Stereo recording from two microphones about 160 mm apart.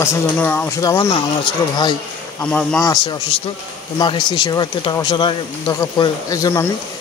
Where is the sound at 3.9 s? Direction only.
25° left (ahead or behind).